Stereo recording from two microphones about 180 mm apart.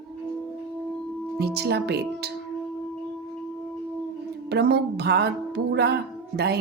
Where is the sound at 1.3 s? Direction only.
65° right (ahead or behind).